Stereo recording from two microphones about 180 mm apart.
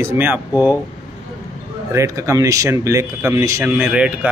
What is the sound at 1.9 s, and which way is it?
A man's voice, 15° right (ahead or behind).